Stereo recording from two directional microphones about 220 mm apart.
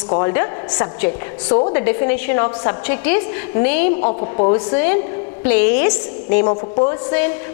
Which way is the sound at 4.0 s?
35° left (ahead or behind).